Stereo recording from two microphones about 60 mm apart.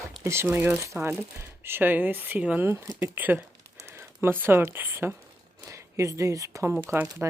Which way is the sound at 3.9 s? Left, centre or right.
Right.